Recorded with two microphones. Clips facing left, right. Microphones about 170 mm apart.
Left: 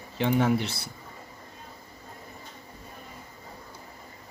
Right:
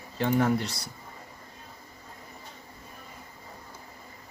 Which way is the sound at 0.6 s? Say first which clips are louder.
Left 1 dB; 25° left (ahead or behind).